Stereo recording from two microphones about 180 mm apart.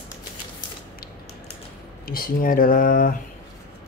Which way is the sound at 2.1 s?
50° left (ahead or behind).